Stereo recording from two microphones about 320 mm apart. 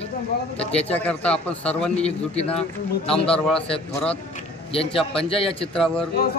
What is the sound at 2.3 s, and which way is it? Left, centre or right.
Speech, centre.